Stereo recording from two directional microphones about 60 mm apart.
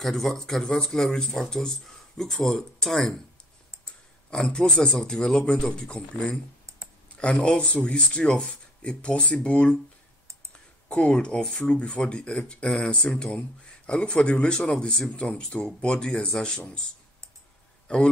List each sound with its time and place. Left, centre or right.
0.0 s speech: centre
4.3 s speech: centre
17.8 s a man's voice: centre